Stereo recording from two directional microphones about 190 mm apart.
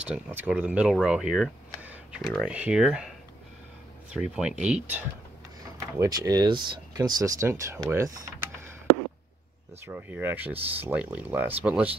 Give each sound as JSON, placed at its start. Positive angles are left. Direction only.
{"t": 0.0, "sound": "speech", "side_deg": -10}
{"t": 4.1, "sound": "speech", "side_deg": -5}
{"t": 5.9, "sound": "speech", "side_deg": -20}
{"t": 9.8, "sound": "speech", "side_deg": -10}